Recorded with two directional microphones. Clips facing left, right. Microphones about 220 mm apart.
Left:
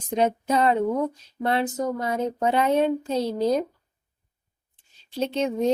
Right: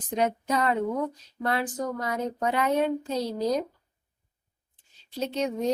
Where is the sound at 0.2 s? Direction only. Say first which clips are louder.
Left 4 dB; 25° left (ahead or behind).